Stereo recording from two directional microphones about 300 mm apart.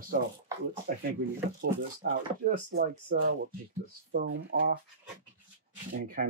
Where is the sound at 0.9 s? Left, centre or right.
Right.